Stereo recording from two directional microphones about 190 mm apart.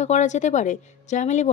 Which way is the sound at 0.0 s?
40° left (ahead or behind).